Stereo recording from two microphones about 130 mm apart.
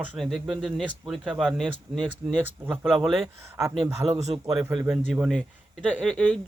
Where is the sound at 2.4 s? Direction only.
15° right (ahead or behind).